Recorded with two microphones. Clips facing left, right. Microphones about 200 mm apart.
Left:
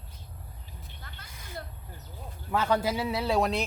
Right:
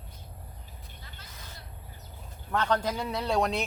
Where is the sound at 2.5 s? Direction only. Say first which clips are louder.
Left 1 dB; 5° left (ahead or behind).